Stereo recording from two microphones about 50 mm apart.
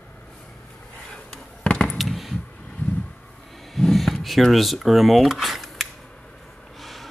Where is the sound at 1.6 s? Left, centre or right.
Left.